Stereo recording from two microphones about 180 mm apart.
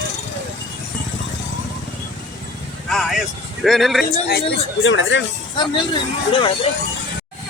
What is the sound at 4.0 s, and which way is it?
Speech, 60° left (ahead or behind).